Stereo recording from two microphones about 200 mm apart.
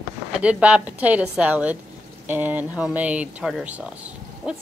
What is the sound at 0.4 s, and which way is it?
Speech, 5° right (ahead or behind).